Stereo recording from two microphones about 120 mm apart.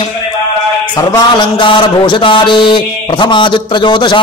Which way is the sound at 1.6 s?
45° left (ahead or behind).